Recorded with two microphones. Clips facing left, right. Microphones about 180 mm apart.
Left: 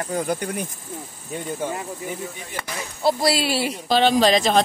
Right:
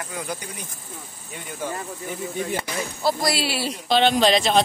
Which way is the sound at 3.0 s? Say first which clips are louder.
Left 4 dB; 30° left (ahead or behind).